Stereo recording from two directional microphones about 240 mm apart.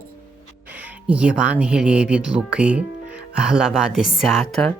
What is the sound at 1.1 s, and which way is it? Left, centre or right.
Speech, centre.